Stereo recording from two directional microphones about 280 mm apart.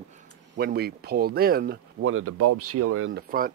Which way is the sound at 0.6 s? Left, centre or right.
Right.